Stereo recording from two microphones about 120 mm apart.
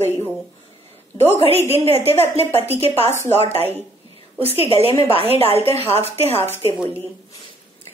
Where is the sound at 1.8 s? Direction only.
55° right (ahead or behind).